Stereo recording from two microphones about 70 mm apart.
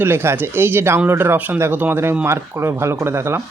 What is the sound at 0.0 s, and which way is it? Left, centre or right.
Speech, right.